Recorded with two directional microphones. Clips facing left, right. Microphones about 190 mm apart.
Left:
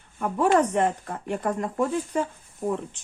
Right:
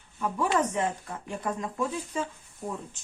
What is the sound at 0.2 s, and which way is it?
Speech, 55° left (ahead or behind).